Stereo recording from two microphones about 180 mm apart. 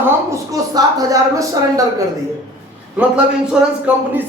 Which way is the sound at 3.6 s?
5° right (ahead or behind).